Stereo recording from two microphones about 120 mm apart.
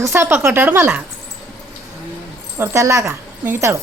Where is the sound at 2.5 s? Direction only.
20° right (ahead or behind).